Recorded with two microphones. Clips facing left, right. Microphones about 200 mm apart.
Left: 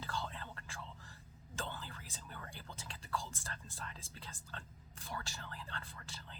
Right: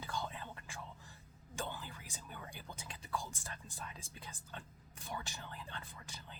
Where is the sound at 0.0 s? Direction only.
15° right (ahead or behind).